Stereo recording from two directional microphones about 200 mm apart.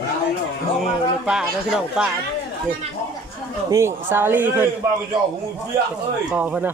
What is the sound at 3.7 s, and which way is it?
Speech, 10° right (ahead or behind).